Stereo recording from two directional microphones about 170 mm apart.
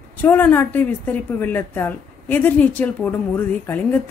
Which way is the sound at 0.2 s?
10° left (ahead or behind).